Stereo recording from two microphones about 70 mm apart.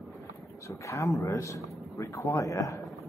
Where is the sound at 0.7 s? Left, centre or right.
Left.